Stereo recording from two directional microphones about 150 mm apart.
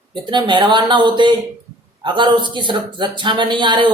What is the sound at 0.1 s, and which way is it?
Speech, 30° right (ahead or behind).